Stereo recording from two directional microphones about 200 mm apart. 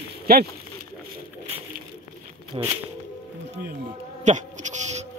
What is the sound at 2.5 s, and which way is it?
Speech, 25° right (ahead or behind).